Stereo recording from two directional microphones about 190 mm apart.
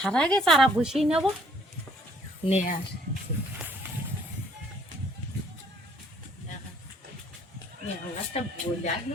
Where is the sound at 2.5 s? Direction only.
40° left (ahead or behind).